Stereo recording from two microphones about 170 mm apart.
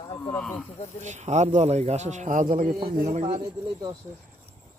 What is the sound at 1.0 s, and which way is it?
A man's voice, 45° right (ahead or behind).